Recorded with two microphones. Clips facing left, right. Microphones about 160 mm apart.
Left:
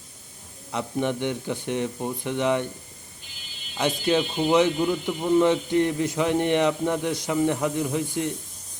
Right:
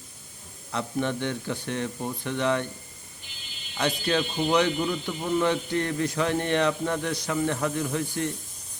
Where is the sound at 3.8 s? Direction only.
20° left (ahead or behind).